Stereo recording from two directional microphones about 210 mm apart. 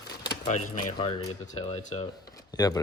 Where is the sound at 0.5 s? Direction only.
90° left.